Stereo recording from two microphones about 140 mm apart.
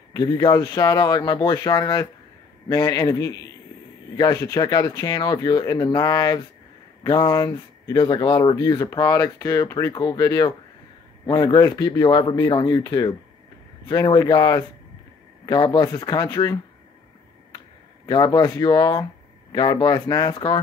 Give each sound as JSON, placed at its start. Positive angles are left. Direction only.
{"t": 0.1, "sound": "speech", "side_deg": 30}
{"t": 18.0, "sound": "speech", "side_deg": 30}